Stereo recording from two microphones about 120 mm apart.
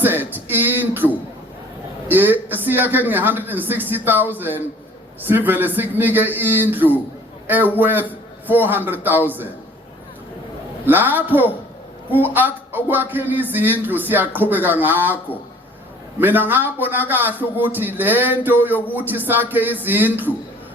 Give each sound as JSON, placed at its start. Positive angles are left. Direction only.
{"t": 0.0, "sound": "a man's voice", "side_deg": -15}
{"t": 2.0, "sound": "a man's voice", "side_deg": -15}
{"t": 10.8, "sound": "a man's voice", "side_deg": -15}
{"t": 16.2, "sound": "a man's voice", "side_deg": -15}